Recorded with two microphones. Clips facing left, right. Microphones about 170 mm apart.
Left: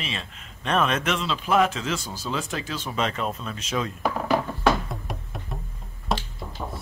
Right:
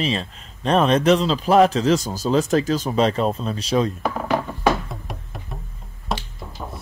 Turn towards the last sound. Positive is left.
turn(degrees=0)  # may be behind; listen again after turning